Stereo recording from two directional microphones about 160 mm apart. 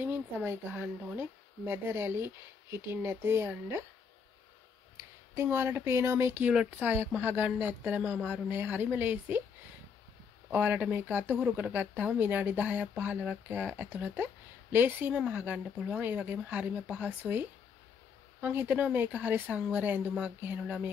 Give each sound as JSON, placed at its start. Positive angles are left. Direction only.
{"t": 0.0, "sound": "speech", "side_deg": -15}
{"t": 5.3, "sound": "speech", "side_deg": -15}
{"t": 10.5, "sound": "speech", "side_deg": -10}